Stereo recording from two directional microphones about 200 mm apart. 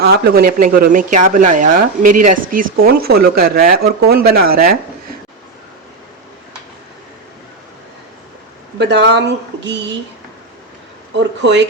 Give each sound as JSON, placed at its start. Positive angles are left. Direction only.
{"t": 0.0, "sound": "speech", "side_deg": -50}
{"t": 8.8, "sound": "speech", "side_deg": -60}
{"t": 11.2, "sound": "speech", "side_deg": -60}